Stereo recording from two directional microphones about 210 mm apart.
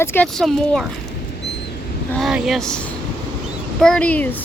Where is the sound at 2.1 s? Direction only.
Centre (ahead or behind).